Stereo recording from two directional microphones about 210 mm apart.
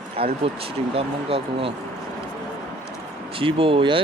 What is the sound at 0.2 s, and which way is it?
Speech, 25° right (ahead or behind).